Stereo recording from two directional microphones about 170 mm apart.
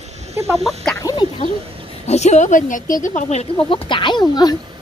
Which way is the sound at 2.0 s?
40° left (ahead or behind).